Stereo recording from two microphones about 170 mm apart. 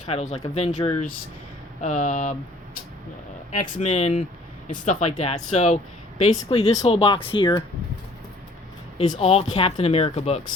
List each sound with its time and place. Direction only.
0.1 s speech: 40° left (ahead or behind)
3.6 s speech: 45° left (ahead or behind); by 7.6 s 30° left (ahead or behind)
9.1 s speech: 35° left (ahead or behind)